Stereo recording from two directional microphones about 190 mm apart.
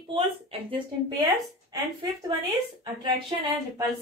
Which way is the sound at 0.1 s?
30° right (ahead or behind).